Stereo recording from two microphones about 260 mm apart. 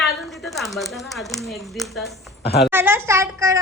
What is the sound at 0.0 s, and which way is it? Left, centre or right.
Speech, centre.